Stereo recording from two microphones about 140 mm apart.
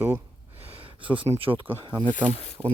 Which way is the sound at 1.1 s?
40° right (ahead or behind).